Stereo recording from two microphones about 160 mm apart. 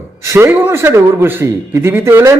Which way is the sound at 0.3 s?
15° right (ahead or behind).